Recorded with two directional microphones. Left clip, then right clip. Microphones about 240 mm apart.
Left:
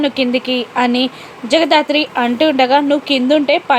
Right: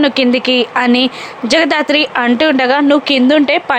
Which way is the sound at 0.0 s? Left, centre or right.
Centre.